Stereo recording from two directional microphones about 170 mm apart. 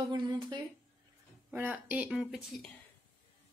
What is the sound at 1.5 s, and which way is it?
Speech, 10° right (ahead or behind).